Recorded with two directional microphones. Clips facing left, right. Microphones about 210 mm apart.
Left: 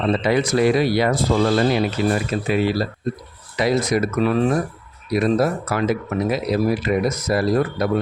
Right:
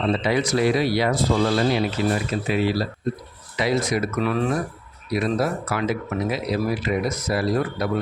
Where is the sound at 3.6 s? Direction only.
40° left (ahead or behind).